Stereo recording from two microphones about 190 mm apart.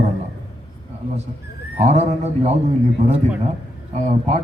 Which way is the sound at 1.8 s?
35° right (ahead or behind).